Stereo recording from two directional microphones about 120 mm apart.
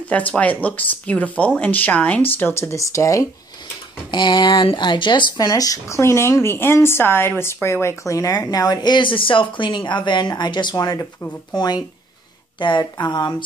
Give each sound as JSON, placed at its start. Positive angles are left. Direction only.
{"t": 0.1, "sound": "speech", "side_deg": 10}
{"t": 4.1, "sound": "speech", "side_deg": 40}